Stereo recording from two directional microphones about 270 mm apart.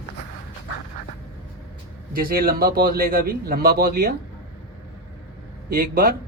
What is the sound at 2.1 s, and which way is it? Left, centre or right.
A man's voice, right.